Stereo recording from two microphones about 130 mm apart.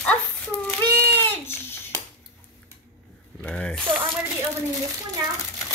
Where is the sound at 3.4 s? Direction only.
5° left (ahead or behind).